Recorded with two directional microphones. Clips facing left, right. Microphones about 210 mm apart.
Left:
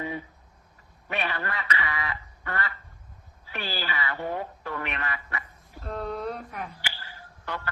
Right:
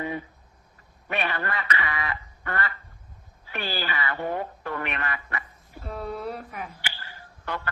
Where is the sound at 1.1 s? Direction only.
55° right (ahead or behind).